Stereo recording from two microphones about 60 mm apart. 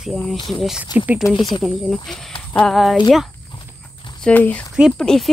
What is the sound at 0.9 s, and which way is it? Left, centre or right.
Speech, right.